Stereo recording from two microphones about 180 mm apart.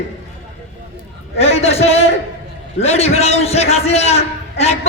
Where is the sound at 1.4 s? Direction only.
35° left (ahead or behind).